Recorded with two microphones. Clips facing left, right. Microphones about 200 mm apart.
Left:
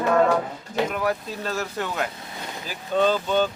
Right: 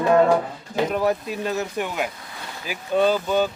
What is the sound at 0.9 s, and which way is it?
Speech, 30° right (ahead or behind).